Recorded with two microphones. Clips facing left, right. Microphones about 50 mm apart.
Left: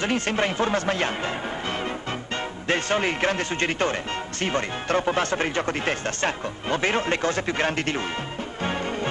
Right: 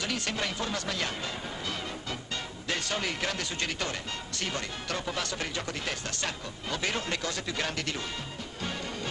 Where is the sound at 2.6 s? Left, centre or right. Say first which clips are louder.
Left 9 dB; left.